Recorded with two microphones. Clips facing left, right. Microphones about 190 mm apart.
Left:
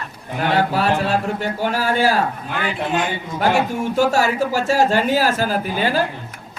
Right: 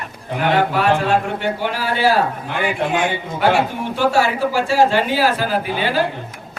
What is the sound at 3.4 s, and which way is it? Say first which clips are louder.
Speech: right 1 dB; 45° left (ahead or behind).